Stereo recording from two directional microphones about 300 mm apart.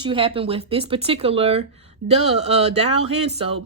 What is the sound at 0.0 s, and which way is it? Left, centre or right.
Speech, centre.